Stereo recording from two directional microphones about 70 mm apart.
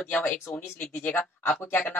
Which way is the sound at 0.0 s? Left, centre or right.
Centre.